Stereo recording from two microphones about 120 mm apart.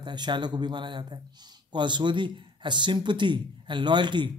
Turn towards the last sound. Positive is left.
turn(degrees=-40)  # may be behind; listen again after turning